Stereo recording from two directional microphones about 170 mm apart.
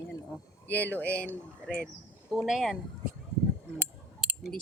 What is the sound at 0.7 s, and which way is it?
Speech, 10° left (ahead or behind).